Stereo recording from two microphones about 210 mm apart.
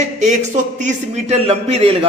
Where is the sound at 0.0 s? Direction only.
35° right (ahead or behind).